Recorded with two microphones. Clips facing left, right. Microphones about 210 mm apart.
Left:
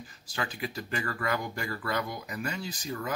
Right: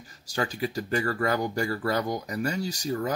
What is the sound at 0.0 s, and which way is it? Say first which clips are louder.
Speech: right 6 dB; 40° right (ahead or behind).